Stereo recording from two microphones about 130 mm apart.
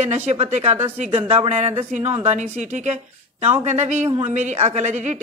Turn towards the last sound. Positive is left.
turn(degrees=-65)  # may be behind; listen again after turning